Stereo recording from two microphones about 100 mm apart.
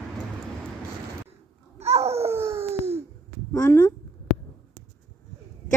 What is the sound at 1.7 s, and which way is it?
Babbling, 90° right.